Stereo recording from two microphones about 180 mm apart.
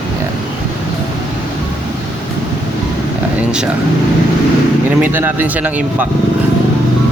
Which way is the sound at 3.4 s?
5° right (ahead or behind).